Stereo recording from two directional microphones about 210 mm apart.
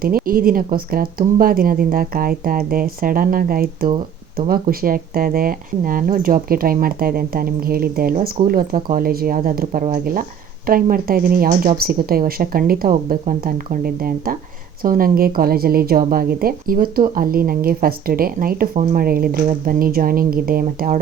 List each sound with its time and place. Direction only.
0.0 s a woman's voice: 45° right (ahead or behind)